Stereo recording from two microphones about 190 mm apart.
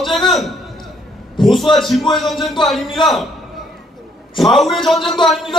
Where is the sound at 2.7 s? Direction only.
Centre (ahead or behind).